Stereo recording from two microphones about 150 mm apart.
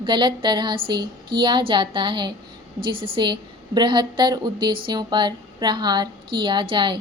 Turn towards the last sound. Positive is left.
turn(degrees=-35)  # may be behind; listen again after turning